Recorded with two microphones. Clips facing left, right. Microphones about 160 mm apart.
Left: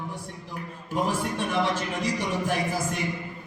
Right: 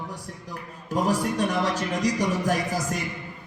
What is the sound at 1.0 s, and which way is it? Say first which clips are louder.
A man's voice: right 6 dB; 40° right (ahead or behind).